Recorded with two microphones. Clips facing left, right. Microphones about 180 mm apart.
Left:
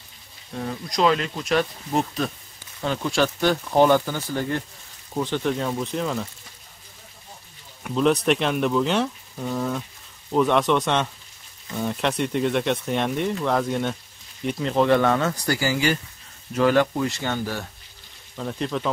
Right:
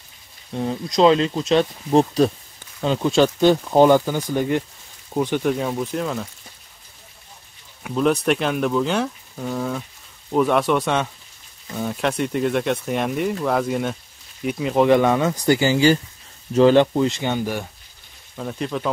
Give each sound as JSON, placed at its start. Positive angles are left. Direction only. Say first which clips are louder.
{"t": 0.6, "sound": "speech", "louder": "right 6 dB", "side_deg": -25}
{"t": 2.8, "sound": "speech", "louder": "right 5 dB", "side_deg": -20}
{"t": 7.8, "sound": "speech", "louder": "right 1 dB", "side_deg": 0}
{"t": 18.3, "sound": "speech", "louder": "right 1 dB", "side_deg": -5}